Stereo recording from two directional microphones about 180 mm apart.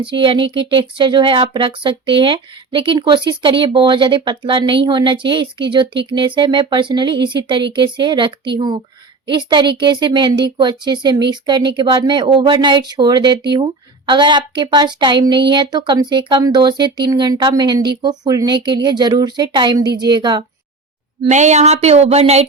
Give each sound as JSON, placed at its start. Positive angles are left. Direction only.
{"t": 0.0, "sound": "speech", "side_deg": -30}
{"t": 21.2, "sound": "speech", "side_deg": -40}